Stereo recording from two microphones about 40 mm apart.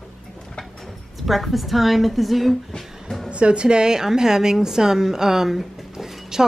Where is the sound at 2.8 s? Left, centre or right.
Centre.